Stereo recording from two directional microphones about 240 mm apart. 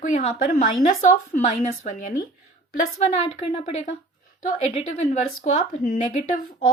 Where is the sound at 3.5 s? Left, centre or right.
Left.